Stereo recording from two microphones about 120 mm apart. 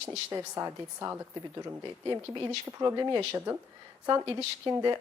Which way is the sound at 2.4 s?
25° right (ahead or behind).